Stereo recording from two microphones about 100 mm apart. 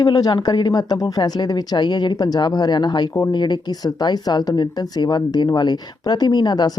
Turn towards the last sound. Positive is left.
turn(degrees=45)  # may be behind; listen again after turning